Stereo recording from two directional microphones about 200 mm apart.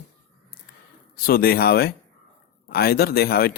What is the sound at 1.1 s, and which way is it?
Speech, 45° left (ahead or behind).